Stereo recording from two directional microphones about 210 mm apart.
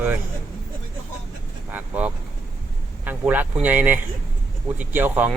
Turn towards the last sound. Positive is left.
turn(degrees=-10)  # may be behind; listen again after turning